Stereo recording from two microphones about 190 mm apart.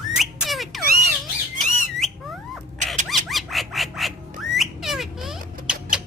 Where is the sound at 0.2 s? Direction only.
Centre (ahead or behind).